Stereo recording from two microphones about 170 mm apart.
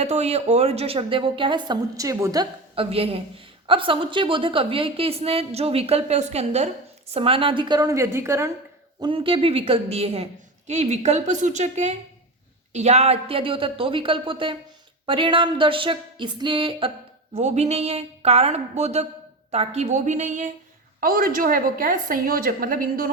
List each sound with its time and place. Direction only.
0.0 s a woman's voice: 40° right (ahead or behind); by 8.5 s 15° right (ahead or behind)
9.0 s a woman's voice: 30° right (ahead or behind)
17.3 s a woman's voice: 40° right (ahead or behind)
21.0 s a woman's voice: 55° right (ahead or behind)